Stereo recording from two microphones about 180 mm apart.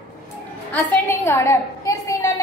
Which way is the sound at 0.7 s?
10° left (ahead or behind).